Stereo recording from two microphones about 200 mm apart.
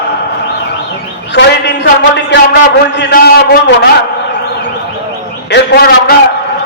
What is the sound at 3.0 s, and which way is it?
Speech, 55° left (ahead or behind).